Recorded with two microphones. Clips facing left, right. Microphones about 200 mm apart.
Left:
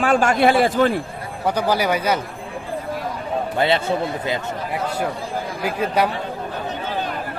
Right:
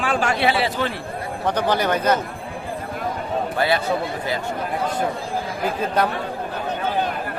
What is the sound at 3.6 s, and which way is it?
Speech, 25° left (ahead or behind).